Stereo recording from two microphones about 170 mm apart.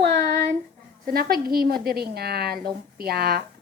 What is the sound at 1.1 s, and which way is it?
A woman's voice, 60° right (ahead or behind).